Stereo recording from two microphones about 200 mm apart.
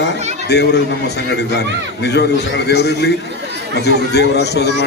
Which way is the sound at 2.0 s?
55° left (ahead or behind).